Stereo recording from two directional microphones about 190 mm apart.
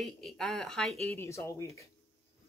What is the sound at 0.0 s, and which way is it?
Speech, centre (ahead or behind).